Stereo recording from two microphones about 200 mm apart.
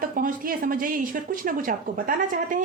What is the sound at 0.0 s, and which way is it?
Speech, 45° right (ahead or behind).